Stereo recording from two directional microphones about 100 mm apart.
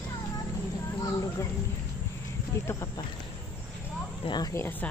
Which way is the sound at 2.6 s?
25° left (ahead or behind).